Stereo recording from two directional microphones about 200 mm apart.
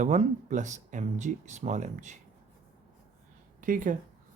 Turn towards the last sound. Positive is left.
turn(degrees=-40)  # may be behind; listen again after turning